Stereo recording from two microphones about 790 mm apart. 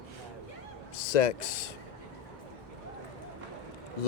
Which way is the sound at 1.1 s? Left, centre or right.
Left.